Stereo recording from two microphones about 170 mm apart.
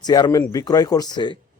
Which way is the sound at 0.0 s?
25° left (ahead or behind).